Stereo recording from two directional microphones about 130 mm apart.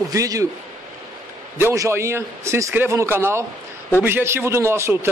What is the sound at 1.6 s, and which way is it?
A man's voice, 20° right (ahead or behind).